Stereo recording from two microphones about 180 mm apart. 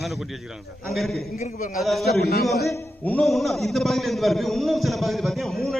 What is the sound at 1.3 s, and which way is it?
Speech, 45° left (ahead or behind).